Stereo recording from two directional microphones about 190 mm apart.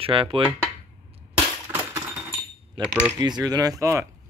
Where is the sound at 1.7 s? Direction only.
10° right (ahead or behind).